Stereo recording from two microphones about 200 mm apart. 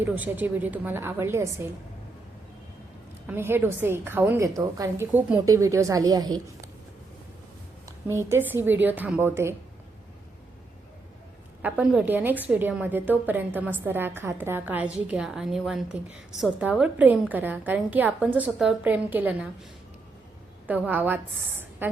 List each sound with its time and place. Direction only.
0.0 s a woman's voice: 10° right (ahead or behind)
3.2 s a woman's voice: 10° right (ahead or behind)
7.9 s a woman's voice: 15° right (ahead or behind)
11.6 s a woman's voice: 5° right (ahead or behind)
20.7 s a woman's voice: 10° right (ahead or behind)
21.8 s a sound: 10° right (ahead or behind)